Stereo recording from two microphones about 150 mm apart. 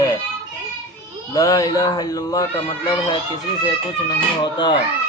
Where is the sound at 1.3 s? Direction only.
25° left (ahead or behind).